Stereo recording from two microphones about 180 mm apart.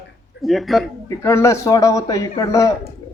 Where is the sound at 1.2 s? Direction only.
15° left (ahead or behind).